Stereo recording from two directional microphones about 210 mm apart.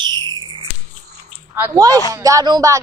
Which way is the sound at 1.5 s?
15° right (ahead or behind).